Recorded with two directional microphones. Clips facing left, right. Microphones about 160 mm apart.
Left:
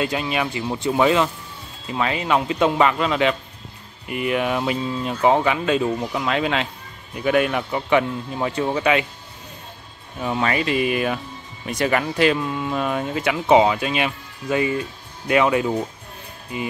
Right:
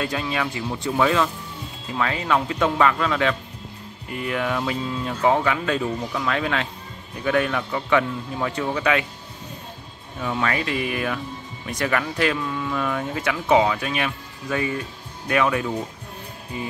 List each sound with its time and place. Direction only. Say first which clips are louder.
0.0 s speech: left 2 dB; 15° left (ahead or behind)
10.2 s speech: left 3 dB; 20° left (ahead or behind)